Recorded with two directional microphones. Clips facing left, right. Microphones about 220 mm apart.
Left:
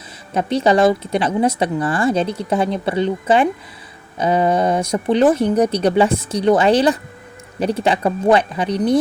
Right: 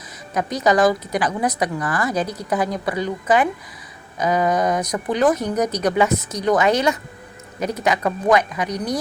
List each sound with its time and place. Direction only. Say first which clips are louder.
0.3 s a woman's voice: left 3 dB; 30° left (ahead or behind)